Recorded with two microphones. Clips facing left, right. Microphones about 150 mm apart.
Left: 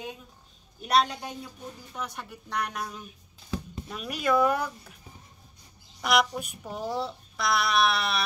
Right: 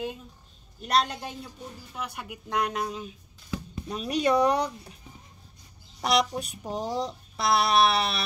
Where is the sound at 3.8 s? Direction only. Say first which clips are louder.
Right 4 dB; 35° right (ahead or behind).